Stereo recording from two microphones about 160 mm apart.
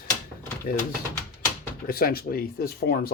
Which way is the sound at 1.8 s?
70° left (ahead or behind).